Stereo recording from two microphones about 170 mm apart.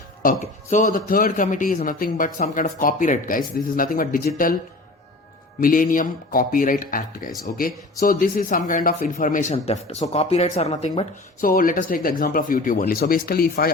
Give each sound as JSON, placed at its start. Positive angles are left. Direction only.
{"t": 0.2, "sound": "speech", "side_deg": 50}
{"t": 5.5, "sound": "speech", "side_deg": 55}
{"t": 11.3, "sound": "speech", "side_deg": 55}